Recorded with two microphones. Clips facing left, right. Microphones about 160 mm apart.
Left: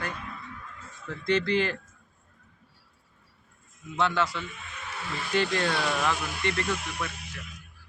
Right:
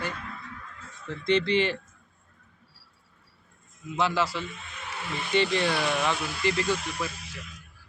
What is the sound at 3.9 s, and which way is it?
Speech, 5° right (ahead or behind).